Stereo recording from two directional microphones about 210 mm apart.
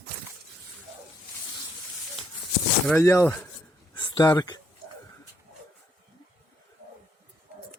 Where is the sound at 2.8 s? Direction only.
10° left (ahead or behind).